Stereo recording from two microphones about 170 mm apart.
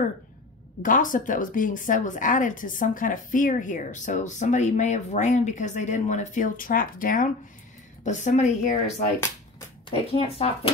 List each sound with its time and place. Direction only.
0.8 s speech: 50° left (ahead or behind); by 10.7 s 35° left (ahead or behind)